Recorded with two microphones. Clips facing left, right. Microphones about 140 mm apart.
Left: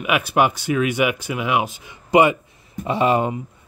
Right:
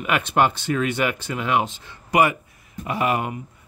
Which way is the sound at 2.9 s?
25° left (ahead or behind).